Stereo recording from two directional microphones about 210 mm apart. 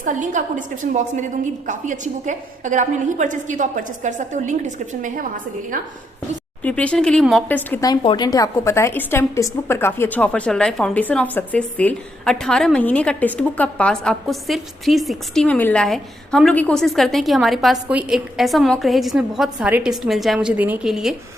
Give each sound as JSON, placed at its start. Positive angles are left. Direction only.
{"t": 0.0, "sound": "a woman's voice", "side_deg": -35}
{"t": 6.6, "sound": "speech", "side_deg": 5}